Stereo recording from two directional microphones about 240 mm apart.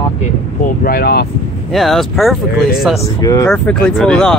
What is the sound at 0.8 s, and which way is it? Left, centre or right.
Speech, left.